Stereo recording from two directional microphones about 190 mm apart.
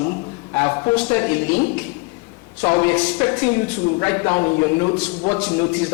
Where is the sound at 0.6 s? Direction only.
15° left (ahead or behind).